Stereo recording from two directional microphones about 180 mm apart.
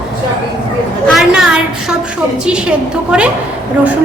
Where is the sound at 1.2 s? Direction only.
5° right (ahead or behind).